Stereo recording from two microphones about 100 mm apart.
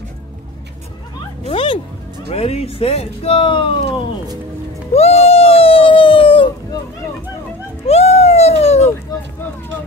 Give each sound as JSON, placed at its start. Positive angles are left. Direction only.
{"t": 1.5, "sound": "music", "side_deg": 60}
{"t": 2.2, "sound": "speech", "side_deg": 90}
{"t": 4.9, "sound": "a sound", "side_deg": 90}
{"t": 7.8, "sound": "cat", "side_deg": 90}